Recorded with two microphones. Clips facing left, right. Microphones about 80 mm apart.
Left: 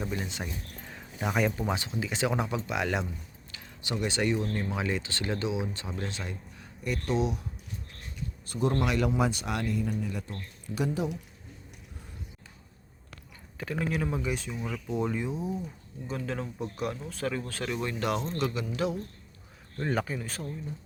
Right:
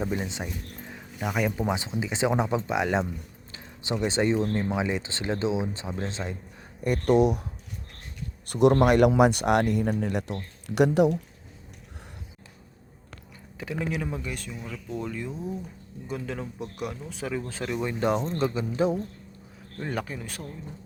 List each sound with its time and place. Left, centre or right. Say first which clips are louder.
0.0 s speech: right 4 dB; centre
1.5 s speech: right 3 dB; centre
6.8 s speech: right 8 dB; right
8.4 s speech: right 9 dB; right
8.7 s speech: right 7 dB; right
13.6 s speech: even; centre
14.8 s speech: left 2 dB; centre
16.0 s speech: right 1 dB; centre
18.0 s speech: right 6 dB; right
19.7 s speech: left 2 dB; centre